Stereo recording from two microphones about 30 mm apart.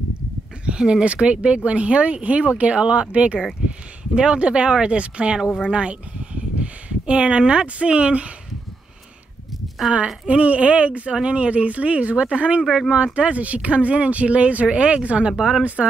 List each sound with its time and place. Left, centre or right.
0.7 s speech: right
1.0 s speech: right
6.6 s a sound: right
7.6 s speech: right
10.2 s speech: right
15.3 s speech: centre